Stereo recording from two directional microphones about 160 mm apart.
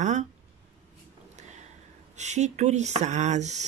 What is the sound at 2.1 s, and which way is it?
Speech, 45° right (ahead or behind).